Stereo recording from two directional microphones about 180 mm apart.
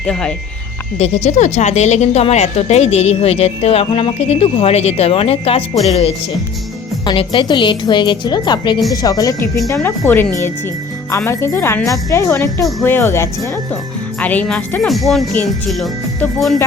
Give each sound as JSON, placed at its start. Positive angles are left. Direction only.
{"t": 0.0, "sound": "speech", "side_deg": 5}
{"t": 0.9, "sound": "a woman's voice", "side_deg": 40}